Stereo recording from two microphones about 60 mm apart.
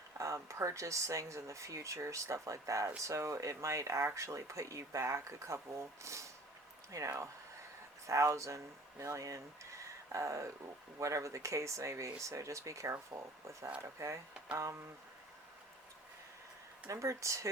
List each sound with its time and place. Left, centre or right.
0.2 s speech: right
6.9 s speech: right
16.9 s speech: right